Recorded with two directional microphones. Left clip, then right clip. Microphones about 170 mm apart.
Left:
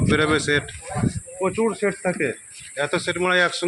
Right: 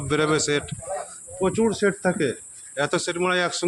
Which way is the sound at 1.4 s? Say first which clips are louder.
Even; 30° right (ahead or behind).